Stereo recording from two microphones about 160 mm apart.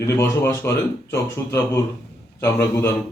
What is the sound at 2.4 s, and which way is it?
Speech, 15° left (ahead or behind).